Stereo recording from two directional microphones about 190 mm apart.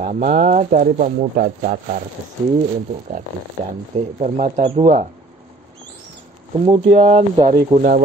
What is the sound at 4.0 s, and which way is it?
Speech, 35° right (ahead or behind).